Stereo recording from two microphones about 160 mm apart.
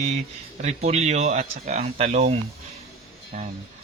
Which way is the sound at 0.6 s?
45° right (ahead or behind).